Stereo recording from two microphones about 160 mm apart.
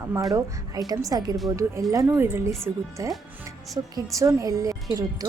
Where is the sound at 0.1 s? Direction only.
20° right (ahead or behind).